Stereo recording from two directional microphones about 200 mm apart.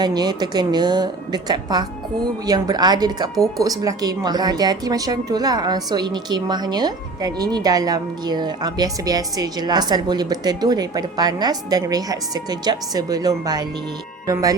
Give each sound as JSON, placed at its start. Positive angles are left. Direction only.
{"t": 0.0, "sound": "a woman's voice", "side_deg": -20}